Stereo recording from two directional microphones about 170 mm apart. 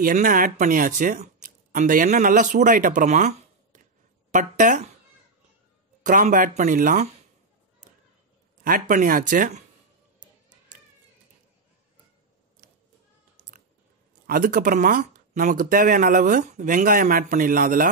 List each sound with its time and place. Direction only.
0.0 s speech: 55° right (ahead or behind)
6.0 s speech: 50° right (ahead or behind)
8.6 s speech: 55° right (ahead or behind)
14.2 s speech: 55° right (ahead or behind)